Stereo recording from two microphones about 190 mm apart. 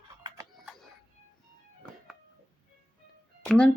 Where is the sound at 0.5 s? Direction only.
Centre (ahead or behind).